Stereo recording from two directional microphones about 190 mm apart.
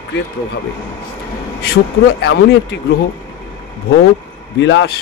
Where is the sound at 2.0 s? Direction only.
60° left (ahead or behind).